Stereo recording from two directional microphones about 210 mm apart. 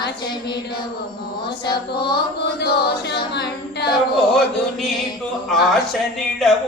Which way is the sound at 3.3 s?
55° left (ahead or behind).